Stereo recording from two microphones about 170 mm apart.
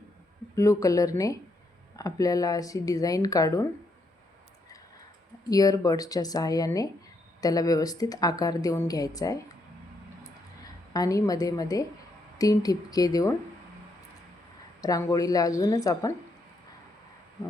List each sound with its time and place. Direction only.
0.5 s a woman's voice: 20° left (ahead or behind)
5.5 s a woman's voice: 20° left (ahead or behind)
10.9 s a woman's voice: 20° left (ahead or behind)
14.8 s a woman's voice: 20° left (ahead or behind)